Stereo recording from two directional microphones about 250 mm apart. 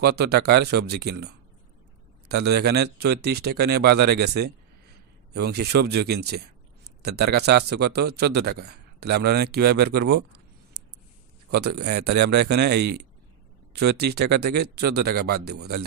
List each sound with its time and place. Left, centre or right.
0.0 s speech: right
11.5 s speech: right